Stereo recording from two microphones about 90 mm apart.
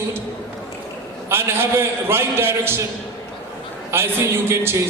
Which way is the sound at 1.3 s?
25° right (ahead or behind).